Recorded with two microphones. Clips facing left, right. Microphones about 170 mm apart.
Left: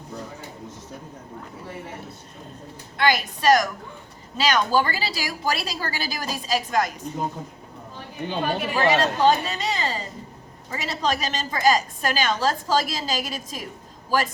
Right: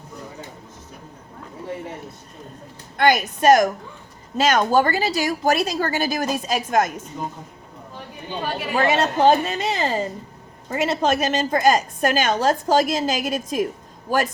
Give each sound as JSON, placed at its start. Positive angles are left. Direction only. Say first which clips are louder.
{"t": 3.0, "sound": "a woman's voice", "louder": "right 4 dB", "side_deg": -50}
{"t": 8.7, "sound": "a woman's voice", "louder": "right 3 dB", "side_deg": -50}